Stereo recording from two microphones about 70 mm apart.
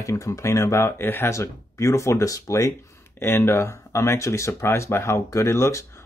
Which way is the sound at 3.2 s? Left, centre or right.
Left.